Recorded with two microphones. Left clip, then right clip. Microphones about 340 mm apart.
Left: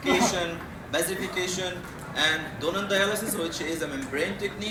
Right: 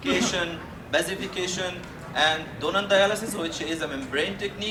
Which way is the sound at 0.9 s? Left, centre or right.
Right.